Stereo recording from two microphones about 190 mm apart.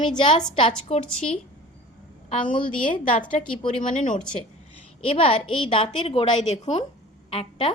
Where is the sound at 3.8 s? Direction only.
45° left (ahead or behind).